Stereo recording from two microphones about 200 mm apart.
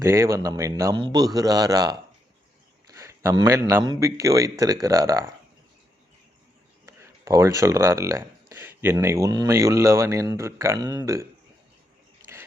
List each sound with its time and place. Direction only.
0.0 s speech: 15° right (ahead or behind)
6.8 s speech: 15° right (ahead or behind)